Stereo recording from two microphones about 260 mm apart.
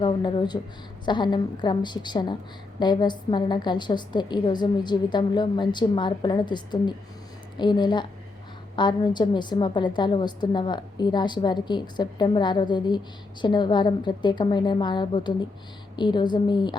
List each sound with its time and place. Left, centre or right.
0.0 s a woman's voice: centre